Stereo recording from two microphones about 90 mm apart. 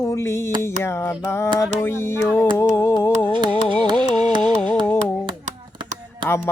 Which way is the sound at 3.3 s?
60° right (ahead or behind).